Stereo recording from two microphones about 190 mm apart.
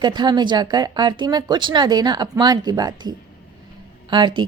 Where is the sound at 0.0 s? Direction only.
20° right (ahead or behind).